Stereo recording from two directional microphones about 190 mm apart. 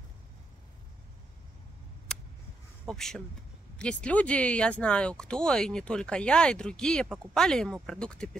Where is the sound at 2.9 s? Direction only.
Centre (ahead or behind).